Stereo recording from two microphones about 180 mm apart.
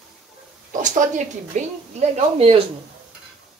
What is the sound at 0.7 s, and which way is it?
Speech, 45° right (ahead or behind).